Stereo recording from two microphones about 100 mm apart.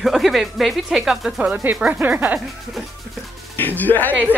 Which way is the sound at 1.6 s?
20° right (ahead or behind).